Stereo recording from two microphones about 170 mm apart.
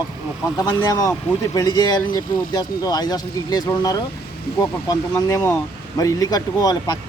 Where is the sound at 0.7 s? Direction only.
20° left (ahead or behind).